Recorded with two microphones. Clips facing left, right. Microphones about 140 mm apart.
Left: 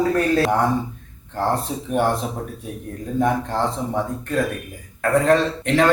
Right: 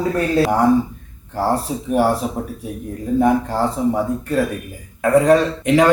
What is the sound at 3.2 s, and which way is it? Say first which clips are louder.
A man's voice: right 3 dB; 10° right (ahead or behind).